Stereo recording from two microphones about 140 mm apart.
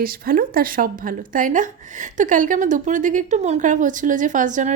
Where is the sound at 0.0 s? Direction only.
90° right.